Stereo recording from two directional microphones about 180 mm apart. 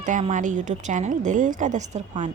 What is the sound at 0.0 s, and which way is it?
A woman's voice, 40° right (ahead or behind).